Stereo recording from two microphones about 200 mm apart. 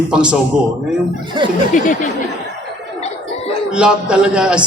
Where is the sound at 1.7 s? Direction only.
40° left (ahead or behind).